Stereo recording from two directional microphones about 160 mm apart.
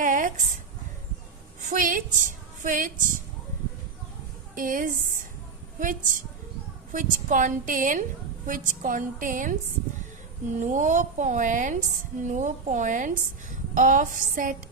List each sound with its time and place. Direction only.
0.0 s a sound: 55° right (ahead or behind)
1.7 s a woman's voice: 55° right (ahead or behind)
4.6 s a woman's voice: 55° right (ahead or behind)
10.6 s a woman's voice: 50° right (ahead or behind)